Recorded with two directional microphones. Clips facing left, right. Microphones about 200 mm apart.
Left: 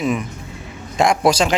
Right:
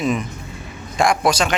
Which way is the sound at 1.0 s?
25° left (ahead or behind).